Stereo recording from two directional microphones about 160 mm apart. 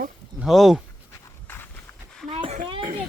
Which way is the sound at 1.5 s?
15° left (ahead or behind).